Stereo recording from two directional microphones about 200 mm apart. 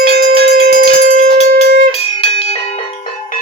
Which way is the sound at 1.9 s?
30° left (ahead or behind).